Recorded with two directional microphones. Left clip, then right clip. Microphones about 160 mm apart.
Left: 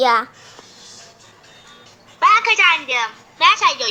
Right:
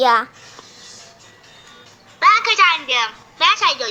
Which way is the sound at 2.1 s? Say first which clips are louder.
Even; centre (ahead or behind).